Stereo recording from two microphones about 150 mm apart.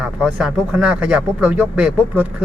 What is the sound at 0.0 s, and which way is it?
Speech, 5° right (ahead or behind).